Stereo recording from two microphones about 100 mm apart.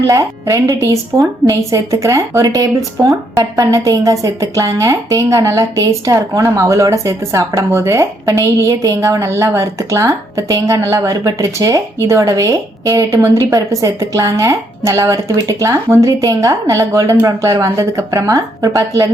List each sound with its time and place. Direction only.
0.1 s speech: 30° right (ahead or behind)